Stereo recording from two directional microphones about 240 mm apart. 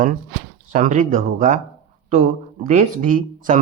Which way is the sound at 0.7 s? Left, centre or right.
Right.